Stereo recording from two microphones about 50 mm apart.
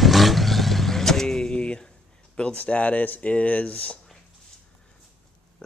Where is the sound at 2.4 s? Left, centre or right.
Left.